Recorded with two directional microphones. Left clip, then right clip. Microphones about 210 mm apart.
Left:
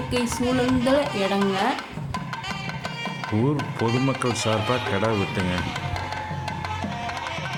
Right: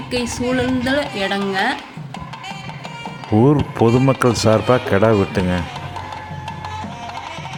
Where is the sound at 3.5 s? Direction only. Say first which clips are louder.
Right 10 dB; 25° right (ahead or behind).